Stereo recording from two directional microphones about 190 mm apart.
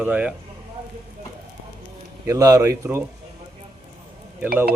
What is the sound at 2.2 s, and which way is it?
Speech, 20° right (ahead or behind).